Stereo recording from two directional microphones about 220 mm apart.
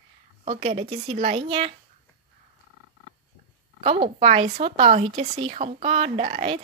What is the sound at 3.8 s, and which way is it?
Speech, 25° right (ahead or behind).